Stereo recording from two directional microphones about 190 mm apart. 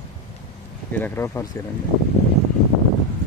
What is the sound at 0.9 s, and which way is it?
Speech, 10° left (ahead or behind).